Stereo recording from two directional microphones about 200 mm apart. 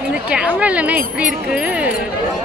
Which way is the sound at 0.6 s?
5° right (ahead or behind).